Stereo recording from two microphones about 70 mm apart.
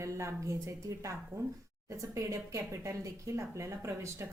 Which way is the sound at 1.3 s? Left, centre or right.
Right.